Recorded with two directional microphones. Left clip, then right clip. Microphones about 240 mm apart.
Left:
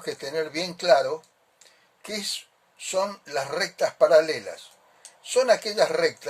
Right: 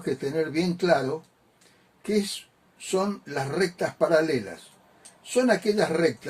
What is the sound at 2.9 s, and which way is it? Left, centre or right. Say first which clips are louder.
Speech: left 1 dB; left.